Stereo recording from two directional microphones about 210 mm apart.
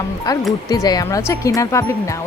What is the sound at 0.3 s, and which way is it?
Speech, 15° left (ahead or behind).